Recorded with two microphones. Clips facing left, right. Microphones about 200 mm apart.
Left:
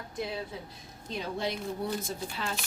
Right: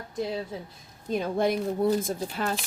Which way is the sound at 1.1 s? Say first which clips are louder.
Right 8 dB; 50° right (ahead or behind).